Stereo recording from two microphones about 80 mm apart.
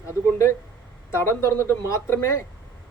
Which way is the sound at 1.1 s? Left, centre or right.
Left.